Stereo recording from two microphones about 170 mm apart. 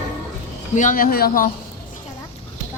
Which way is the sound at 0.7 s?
50° left (ahead or behind).